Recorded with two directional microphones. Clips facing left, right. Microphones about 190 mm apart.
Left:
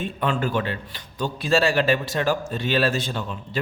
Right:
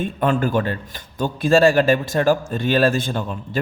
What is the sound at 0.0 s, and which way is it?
A man's voice, 50° right (ahead or behind).